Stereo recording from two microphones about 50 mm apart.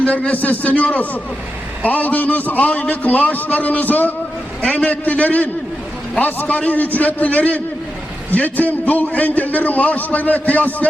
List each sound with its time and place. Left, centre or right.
0.0 s a man's voice: left